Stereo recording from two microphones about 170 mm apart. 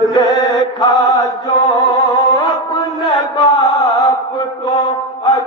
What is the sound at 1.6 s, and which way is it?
Music, 25° left (ahead or behind).